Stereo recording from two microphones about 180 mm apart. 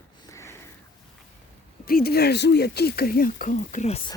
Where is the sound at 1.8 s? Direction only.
60° left (ahead or behind); by 4.0 s 45° left (ahead or behind).